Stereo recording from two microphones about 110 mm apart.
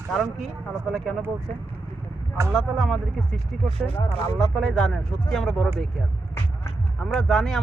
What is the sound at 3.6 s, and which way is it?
Speech, 65° right (ahead or behind).